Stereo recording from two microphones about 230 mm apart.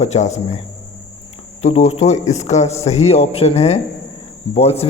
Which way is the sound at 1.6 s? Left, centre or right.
Left.